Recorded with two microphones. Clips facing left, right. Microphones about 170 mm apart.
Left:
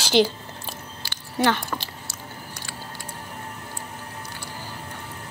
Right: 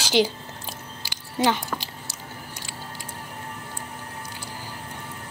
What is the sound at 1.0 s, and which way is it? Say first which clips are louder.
Chewing: left 1 dB; 15° right (ahead or behind).